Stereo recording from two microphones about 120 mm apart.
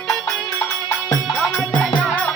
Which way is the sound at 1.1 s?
35° left (ahead or behind).